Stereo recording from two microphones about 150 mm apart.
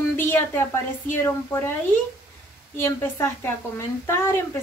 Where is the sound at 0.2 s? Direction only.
15° left (ahead or behind).